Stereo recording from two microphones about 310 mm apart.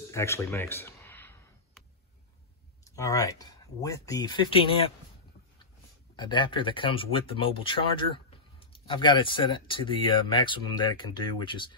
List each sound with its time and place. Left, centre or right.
0.1 s a sound: centre
2.8 s speech: centre
6.1 s speech: centre